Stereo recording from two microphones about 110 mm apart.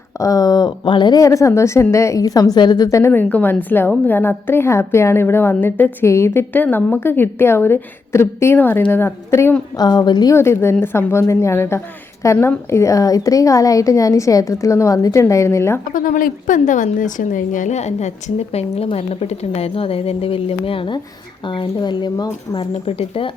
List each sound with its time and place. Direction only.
0.2 s speech: 35° left (ahead or behind)
1.2 s a woman's voice: 30° left (ahead or behind)
3.1 s a woman's voice: 15° left (ahead or behind)
9.7 s speech: 35° left (ahead or behind)
10.3 s a woman's voice: 25° left (ahead or behind)
17.7 s a woman's voice: 90° left; by 22.6 s 45° left (ahead or behind)
22.7 s speech: 65° left (ahead or behind)